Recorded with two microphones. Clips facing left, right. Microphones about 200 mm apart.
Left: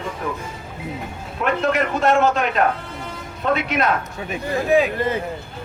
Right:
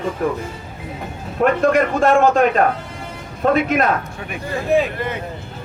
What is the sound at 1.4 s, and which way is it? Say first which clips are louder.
A man's voice: right 5 dB; 45° right (ahead or behind).